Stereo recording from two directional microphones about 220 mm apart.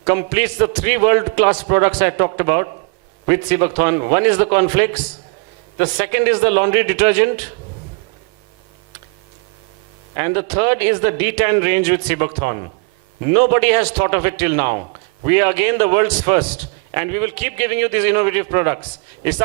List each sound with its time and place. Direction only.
0.0 s a man's voice: 15° right (ahead or behind)
10.2 s a man's voice: 15° right (ahead or behind)